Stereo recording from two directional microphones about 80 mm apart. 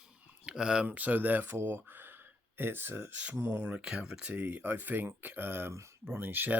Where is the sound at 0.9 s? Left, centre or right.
Right.